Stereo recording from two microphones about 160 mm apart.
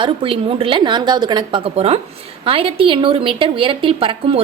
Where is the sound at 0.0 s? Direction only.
35° right (ahead or behind).